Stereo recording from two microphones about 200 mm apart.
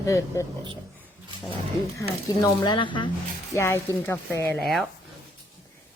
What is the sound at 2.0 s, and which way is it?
Speech, 20° left (ahead or behind).